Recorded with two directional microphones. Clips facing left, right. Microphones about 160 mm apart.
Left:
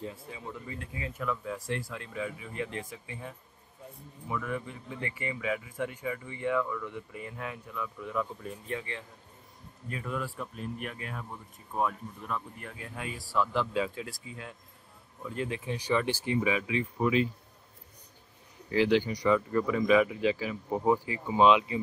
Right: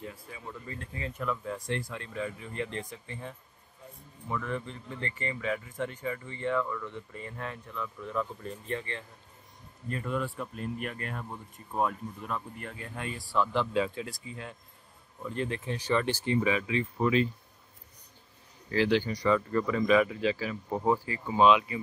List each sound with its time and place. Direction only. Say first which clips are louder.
0.0 s speech: left 3 dB; 25° left (ahead or behind)
0.5 s speech: even; 10° left (ahead or behind)
18.7 s speech: left 1 dB; 15° left (ahead or behind)